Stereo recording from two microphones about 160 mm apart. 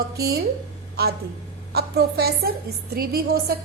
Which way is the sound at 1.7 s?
75° right (ahead or behind).